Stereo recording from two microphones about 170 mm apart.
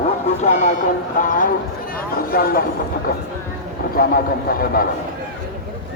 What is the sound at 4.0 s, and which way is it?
Speech, 60° left (ahead or behind).